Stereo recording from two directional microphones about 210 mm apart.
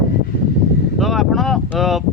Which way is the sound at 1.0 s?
Centre (ahead or behind).